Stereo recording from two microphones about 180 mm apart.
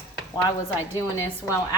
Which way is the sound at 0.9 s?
15° left (ahead or behind).